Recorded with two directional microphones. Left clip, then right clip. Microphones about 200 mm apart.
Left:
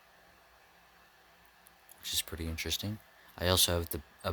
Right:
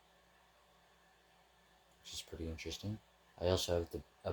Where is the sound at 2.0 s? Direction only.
45° left (ahead or behind).